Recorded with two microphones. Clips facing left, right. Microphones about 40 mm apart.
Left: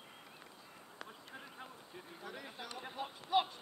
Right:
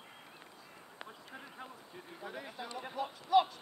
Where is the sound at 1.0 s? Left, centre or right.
Centre.